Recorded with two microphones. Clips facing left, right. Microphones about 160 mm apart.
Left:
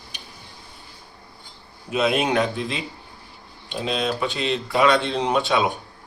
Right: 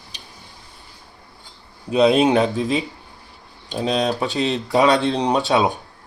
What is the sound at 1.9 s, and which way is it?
Speech, 30° right (ahead or behind).